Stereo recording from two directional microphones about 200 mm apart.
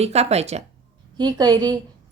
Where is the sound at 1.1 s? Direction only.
20° right (ahead or behind).